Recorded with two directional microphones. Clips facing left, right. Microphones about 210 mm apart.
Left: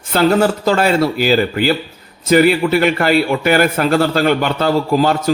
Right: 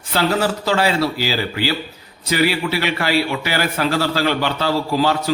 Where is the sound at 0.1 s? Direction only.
50° left (ahead or behind).